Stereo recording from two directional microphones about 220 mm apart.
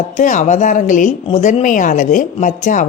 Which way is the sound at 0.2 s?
35° left (ahead or behind).